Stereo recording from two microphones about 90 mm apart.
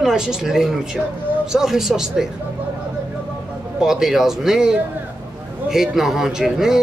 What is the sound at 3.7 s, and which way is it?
Speech, 5° right (ahead or behind).